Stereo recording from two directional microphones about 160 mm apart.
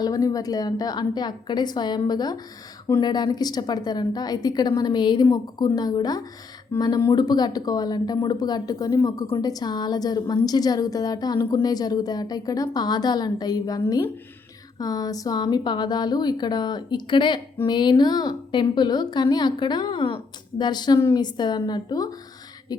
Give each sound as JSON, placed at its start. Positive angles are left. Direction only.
{"t": 0.0, "sound": "speech", "side_deg": 20}